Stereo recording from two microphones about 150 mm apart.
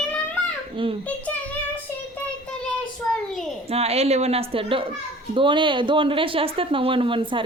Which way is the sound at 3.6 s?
45° right (ahead or behind).